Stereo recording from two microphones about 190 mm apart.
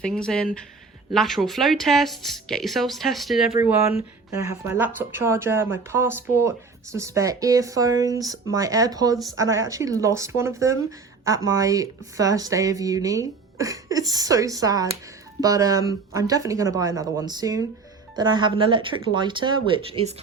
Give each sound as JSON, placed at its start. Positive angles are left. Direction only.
{"t": 0.0, "sound": "speech", "side_deg": 5}